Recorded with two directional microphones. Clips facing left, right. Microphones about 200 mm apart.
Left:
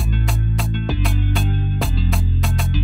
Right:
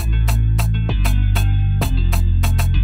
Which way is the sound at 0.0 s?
Centre (ahead or behind).